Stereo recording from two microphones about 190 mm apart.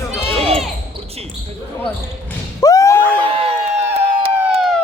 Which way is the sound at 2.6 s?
20° left (ahead or behind).